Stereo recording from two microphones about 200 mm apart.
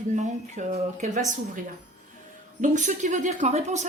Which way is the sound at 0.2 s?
35° right (ahead or behind).